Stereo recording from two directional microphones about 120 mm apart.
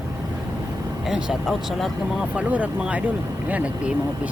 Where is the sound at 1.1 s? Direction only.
5° right (ahead or behind).